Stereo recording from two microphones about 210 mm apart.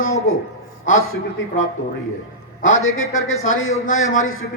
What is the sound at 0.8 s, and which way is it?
Speech, 70° left (ahead or behind).